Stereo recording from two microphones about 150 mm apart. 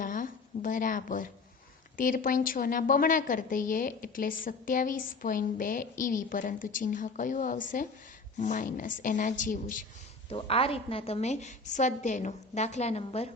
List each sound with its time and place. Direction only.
0.0 s a sound: 65° left (ahead or behind)
2.0 s a woman's voice: 65° left (ahead or behind)
10.2 s a woman's voice: 40° left (ahead or behind)